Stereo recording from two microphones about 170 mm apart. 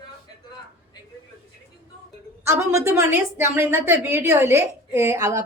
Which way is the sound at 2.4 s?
15° right (ahead or behind).